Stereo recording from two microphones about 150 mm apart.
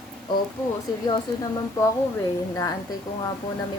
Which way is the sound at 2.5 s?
20° left (ahead or behind).